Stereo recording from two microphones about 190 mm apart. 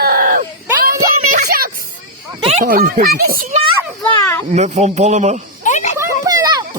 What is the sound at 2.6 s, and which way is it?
A child's voice, 50° right (ahead or behind).